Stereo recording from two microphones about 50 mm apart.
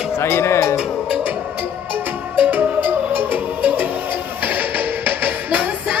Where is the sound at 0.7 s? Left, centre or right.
Centre.